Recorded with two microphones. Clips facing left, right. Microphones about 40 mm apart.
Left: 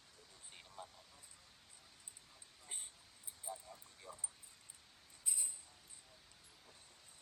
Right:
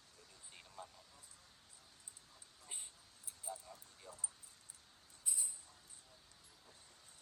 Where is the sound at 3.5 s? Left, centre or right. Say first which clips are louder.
Even; centre.